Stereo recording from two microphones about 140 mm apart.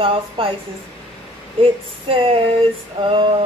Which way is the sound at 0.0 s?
40° right (ahead or behind).